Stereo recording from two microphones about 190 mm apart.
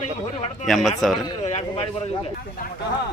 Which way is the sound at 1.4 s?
30° left (ahead or behind).